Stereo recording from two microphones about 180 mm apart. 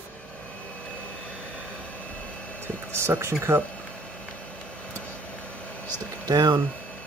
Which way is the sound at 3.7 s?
5° left (ahead or behind).